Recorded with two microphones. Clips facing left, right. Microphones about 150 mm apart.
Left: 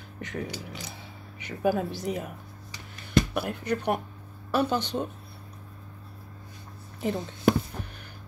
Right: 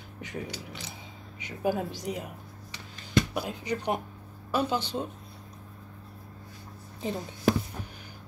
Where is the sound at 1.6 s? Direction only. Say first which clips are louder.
Left 3 dB; 15° right (ahead or behind).